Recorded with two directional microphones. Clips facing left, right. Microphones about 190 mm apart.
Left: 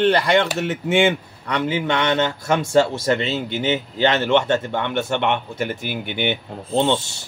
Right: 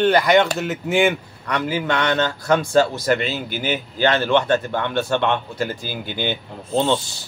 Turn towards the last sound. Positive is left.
turn(degrees=25)  # may be behind; listen again after turning